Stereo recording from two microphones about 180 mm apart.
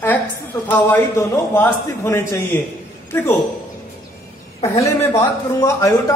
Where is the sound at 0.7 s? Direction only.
10° left (ahead or behind).